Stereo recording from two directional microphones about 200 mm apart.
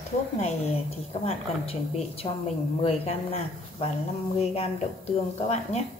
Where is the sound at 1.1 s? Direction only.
30° left (ahead or behind).